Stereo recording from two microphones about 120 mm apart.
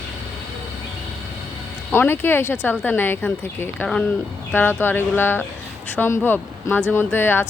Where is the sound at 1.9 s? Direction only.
20° left (ahead or behind).